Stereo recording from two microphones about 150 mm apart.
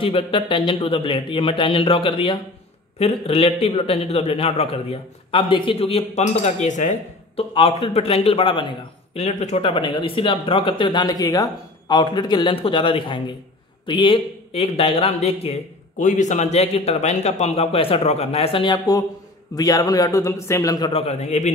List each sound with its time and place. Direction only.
0.0 s a man's voice: 35° left (ahead or behind); by 7.4 s 55° left (ahead or behind)
7.5 s a man's voice: 40° left (ahead or behind)
9.6 s a man's voice: 35° left (ahead or behind)
16.0 s a man's voice: 55° left (ahead or behind); by 20.9 s 25° left (ahead or behind)
20.9 s a man's voice: 40° left (ahead or behind)